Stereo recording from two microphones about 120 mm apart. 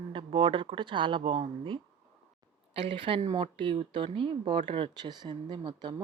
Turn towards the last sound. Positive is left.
turn(degrees=-40)  # may be behind; listen again after turning